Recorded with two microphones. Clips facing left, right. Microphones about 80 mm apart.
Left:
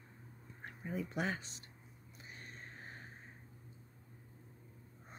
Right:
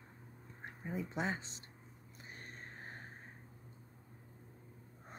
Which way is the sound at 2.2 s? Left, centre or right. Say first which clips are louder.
Right 1 dB; right.